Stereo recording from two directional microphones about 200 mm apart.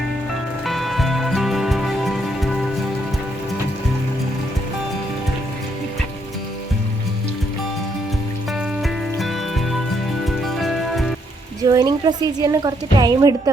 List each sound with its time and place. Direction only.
0.6 s music: centre (ahead or behind)
8.8 s music: centre (ahead or behind)
11.6 s a woman's voice: 15° right (ahead or behind)